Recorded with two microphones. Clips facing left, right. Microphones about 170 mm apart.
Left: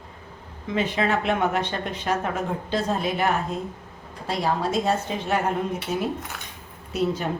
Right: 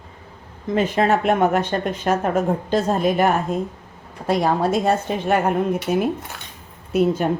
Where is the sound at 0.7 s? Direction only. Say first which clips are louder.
Right 5 dB; 45° right (ahead or behind).